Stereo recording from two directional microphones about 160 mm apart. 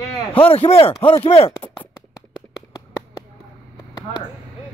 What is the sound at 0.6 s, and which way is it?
Speech, 35° left (ahead or behind).